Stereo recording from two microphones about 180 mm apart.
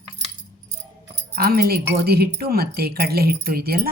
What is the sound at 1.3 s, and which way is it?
Speech, 60° right (ahead or behind).